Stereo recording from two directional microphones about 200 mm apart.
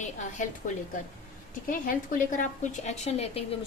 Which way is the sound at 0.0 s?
40° left (ahead or behind).